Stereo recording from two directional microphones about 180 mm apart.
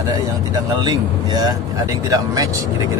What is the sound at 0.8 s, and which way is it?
Speech, 25° right (ahead or behind).